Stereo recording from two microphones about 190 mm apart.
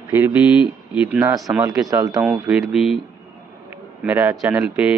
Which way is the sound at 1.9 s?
15° right (ahead or behind).